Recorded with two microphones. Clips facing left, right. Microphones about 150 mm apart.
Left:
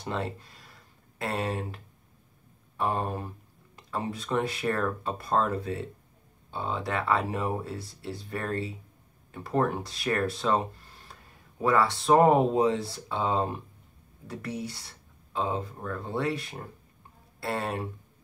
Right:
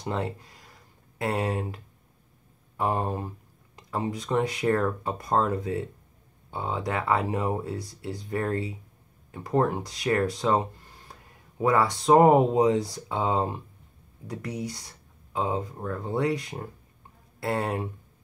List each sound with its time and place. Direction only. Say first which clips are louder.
0.0 s speech: right 2 dB; 15° right (ahead or behind)
2.8 s speech: right 2 dB; 15° right (ahead or behind)
11.6 s speech: right 2 dB; 15° right (ahead or behind)